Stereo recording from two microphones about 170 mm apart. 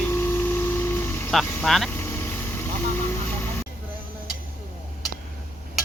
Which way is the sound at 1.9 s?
15° left (ahead or behind).